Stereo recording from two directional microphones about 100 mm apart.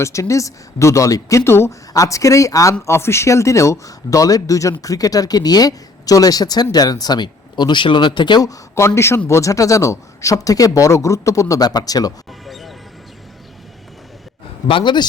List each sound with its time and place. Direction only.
0.0 s speech: 30° left (ahead or behind); by 8.4 s 50° left (ahead or behind)
8.4 s speech: 30° left (ahead or behind)
12.5 s music: centre (ahead or behind)
14.7 s speech: 55° left (ahead or behind)